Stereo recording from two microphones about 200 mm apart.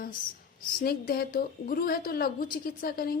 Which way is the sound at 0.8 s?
45° left (ahead or behind).